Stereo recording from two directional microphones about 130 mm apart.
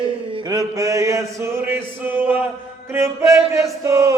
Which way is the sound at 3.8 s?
25° right (ahead or behind).